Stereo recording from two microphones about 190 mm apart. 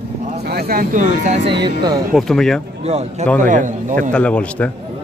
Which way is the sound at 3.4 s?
45° right (ahead or behind).